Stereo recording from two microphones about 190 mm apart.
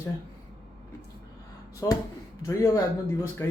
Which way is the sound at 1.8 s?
15° left (ahead or behind).